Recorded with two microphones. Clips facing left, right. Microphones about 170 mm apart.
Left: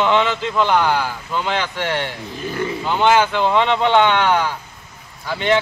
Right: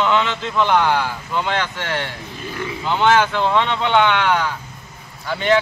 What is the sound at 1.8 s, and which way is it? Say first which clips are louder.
A man's voice: left 3 dB; 20° left (ahead or behind).